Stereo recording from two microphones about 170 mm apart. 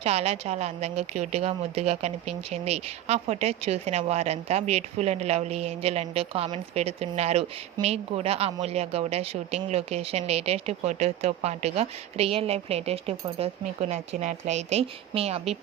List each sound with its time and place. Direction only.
0.0 s a woman's voice: 35° right (ahead or behind)